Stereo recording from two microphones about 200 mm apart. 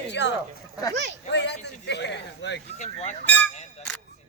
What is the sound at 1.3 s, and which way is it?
Speech, 55° left (ahead or behind).